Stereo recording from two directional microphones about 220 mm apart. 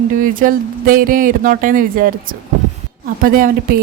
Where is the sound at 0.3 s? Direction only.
40° right (ahead or behind).